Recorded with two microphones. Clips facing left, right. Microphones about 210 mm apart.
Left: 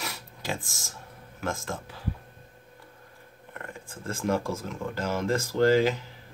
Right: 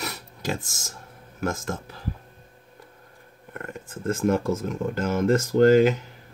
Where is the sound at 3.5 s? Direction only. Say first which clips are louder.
Right 5 dB; 45° right (ahead or behind).